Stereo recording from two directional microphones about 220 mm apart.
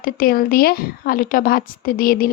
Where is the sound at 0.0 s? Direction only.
40° left (ahead or behind).